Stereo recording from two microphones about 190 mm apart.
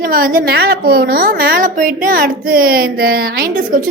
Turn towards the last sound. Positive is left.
turn(degrees=-45)  # may be behind; listen again after turning